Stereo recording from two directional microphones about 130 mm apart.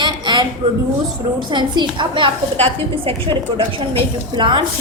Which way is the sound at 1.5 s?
35° right (ahead or behind).